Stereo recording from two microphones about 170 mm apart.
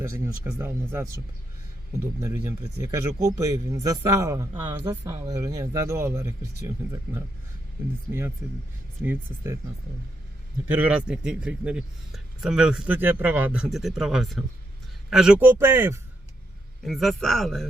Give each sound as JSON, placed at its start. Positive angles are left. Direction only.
{"t": 0.6, "sound": "speech", "side_deg": -15}
{"t": 9.0, "sound": "speech", "side_deg": -15}
{"t": 10.7, "sound": "a man's voice", "side_deg": -10}
{"t": 16.8, "sound": "a man's voice", "side_deg": 0}